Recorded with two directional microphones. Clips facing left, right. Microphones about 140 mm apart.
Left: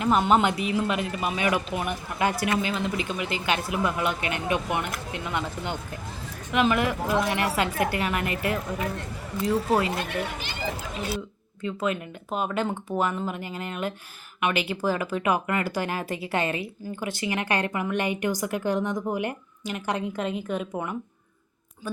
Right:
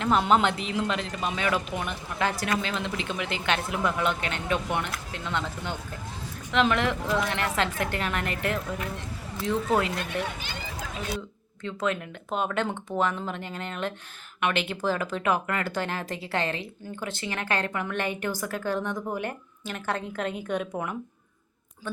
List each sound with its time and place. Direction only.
0.0 s speech: 5° left (ahead or behind)
11.6 s speech: 5° left (ahead or behind)